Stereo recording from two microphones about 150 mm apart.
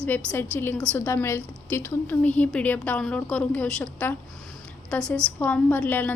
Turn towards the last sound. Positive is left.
turn(degrees=10)  # may be behind; listen again after turning